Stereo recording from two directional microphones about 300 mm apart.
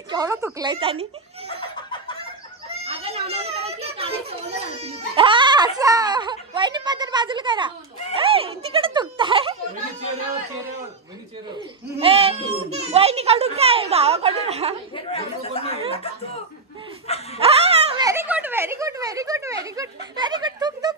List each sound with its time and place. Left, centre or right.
0.1 s speech: centre
2.7 s children playing: centre
12.0 s a child's voice: centre
15.0 s speech: centre
17.4 s speech: centre